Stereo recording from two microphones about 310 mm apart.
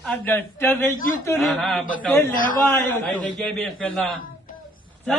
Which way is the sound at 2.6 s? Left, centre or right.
Centre.